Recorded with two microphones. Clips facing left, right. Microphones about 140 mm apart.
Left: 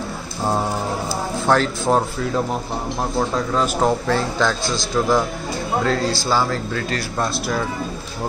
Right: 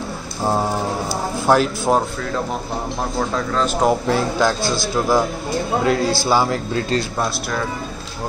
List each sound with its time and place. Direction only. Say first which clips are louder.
1.5 s speech: right 2 dB; 5° right (ahead or behind)
3.2 s a man's voice: left 1 dB; 10° left (ahead or behind)
3.8 s a man's voice: right 4 dB; 10° right (ahead or behind)